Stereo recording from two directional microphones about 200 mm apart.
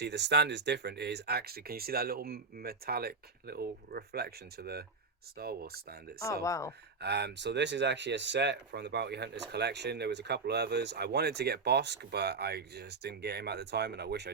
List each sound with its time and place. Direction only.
0.0 s speech: 55° right (ahead or behind)
6.4 s speech: 15° left (ahead or behind)
7.0 s speech: 55° right (ahead or behind)